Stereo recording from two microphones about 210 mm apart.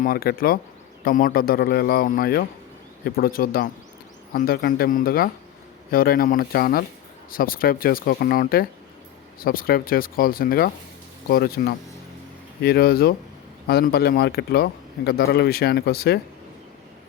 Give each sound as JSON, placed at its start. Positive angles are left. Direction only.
{"t": 0.0, "sound": "a man's voice", "side_deg": 45}